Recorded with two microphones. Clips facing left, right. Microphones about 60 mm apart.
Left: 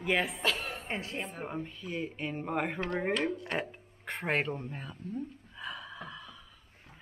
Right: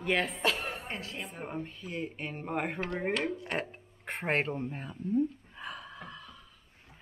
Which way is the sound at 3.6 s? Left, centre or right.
Centre.